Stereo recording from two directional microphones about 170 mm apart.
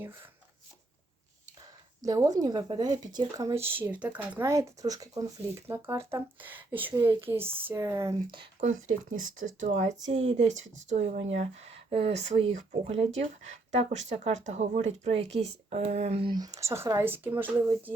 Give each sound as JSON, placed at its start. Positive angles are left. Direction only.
{"t": 0.0, "sound": "speech", "side_deg": -15}
{"t": 2.0, "sound": "a woman's voice", "side_deg": -20}
{"t": 8.6, "sound": "speech", "side_deg": -45}